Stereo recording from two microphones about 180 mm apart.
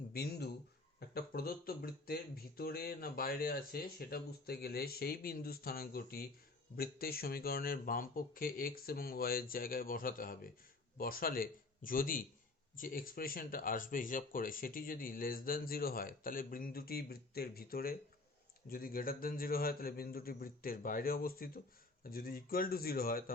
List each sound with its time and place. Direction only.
0.1 s speech: 60° left (ahead or behind)